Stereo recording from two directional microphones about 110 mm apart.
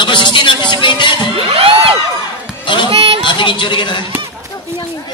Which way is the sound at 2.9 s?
60° right (ahead or behind).